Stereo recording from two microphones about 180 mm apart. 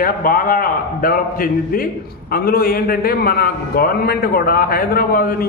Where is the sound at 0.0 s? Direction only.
50° left (ahead or behind).